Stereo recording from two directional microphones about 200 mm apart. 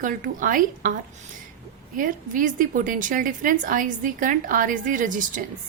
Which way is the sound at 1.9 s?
40° right (ahead or behind).